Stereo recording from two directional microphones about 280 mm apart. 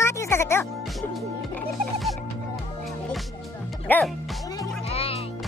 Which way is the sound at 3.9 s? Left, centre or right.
Centre.